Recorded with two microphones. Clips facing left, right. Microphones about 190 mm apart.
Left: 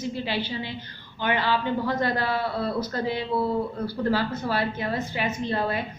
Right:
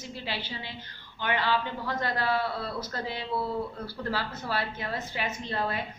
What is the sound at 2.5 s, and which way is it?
Speech, 55° left (ahead or behind).